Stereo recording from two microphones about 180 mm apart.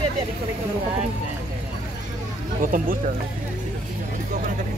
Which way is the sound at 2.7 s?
50° right (ahead or behind).